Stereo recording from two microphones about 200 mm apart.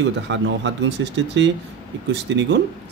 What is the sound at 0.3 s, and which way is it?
Speech, 65° right (ahead or behind).